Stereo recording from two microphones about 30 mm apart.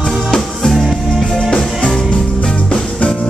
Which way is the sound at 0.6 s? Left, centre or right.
Centre.